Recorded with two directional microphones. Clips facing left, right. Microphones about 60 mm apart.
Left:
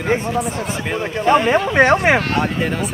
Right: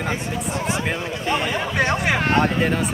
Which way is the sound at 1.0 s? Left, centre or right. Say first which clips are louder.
Left 8 dB; left.